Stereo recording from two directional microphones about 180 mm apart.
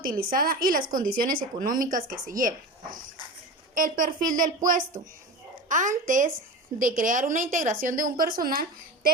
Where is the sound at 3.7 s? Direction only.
50° right (ahead or behind).